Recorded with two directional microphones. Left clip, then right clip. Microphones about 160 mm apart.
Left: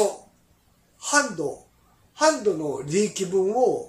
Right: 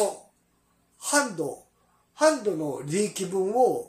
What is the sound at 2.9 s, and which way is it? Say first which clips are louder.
Speech: left 5 dB; 25° right (ahead or behind).